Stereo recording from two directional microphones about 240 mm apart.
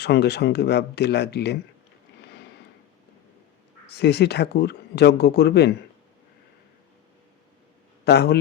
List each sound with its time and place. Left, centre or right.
0.0 s speech: left
3.8 s speech: left
8.0 s speech: left